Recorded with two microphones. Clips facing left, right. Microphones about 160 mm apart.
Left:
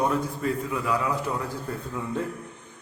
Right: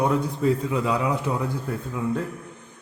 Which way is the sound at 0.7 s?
25° right (ahead or behind).